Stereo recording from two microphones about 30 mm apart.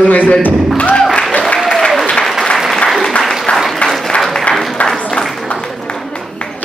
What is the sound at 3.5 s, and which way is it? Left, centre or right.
Applause, centre.